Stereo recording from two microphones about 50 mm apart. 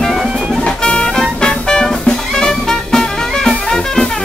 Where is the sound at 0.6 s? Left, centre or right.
Centre.